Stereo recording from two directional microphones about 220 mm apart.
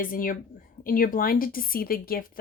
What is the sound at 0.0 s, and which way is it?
A woman's voice, 40° left (ahead or behind).